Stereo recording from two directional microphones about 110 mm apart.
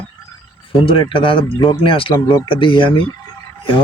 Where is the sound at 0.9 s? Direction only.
50° left (ahead or behind).